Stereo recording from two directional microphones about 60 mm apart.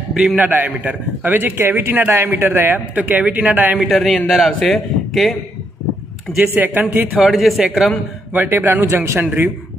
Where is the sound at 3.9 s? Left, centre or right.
Centre.